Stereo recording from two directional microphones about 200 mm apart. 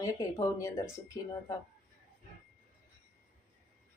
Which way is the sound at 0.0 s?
15° left (ahead or behind).